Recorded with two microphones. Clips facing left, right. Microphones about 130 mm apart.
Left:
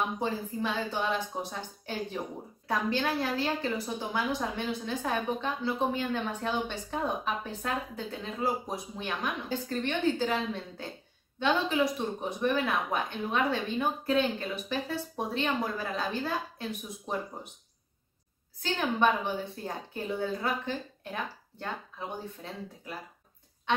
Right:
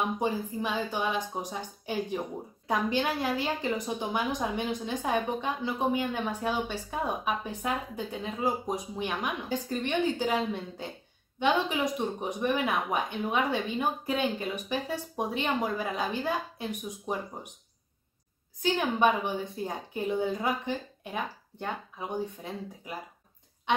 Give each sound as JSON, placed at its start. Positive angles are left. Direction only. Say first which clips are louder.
{"t": 0.2, "sound": "a woman's voice", "louder": "right 2 dB", "side_deg": -15}
{"t": 18.6, "sound": "a woman's voice", "louder": "right 2 dB", "side_deg": -15}